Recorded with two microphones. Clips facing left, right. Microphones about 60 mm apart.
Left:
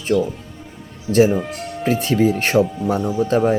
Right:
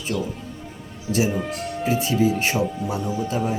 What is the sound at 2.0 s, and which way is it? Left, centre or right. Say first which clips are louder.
Speech: left 4 dB; left.